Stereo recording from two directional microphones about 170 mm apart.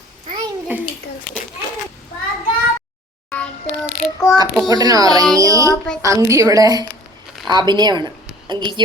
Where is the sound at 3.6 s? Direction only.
40° left (ahead or behind).